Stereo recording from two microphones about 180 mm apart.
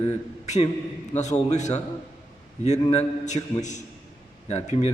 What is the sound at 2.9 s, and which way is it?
A man's voice, 40° left (ahead or behind).